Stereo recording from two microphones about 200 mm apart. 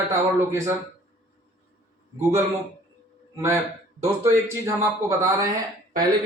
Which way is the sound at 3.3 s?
15° right (ahead or behind).